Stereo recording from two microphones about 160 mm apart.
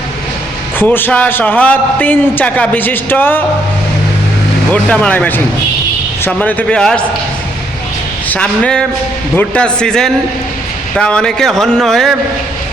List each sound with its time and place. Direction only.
0.8 s a man's voice: 10° left (ahead or behind)
4.7 s a man's voice: 10° left (ahead or behind)
8.3 s a man's voice: 5° left (ahead or behind)